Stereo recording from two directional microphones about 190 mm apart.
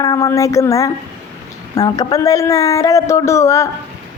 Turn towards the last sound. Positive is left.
turn(degrees=15)  # may be behind; listen again after turning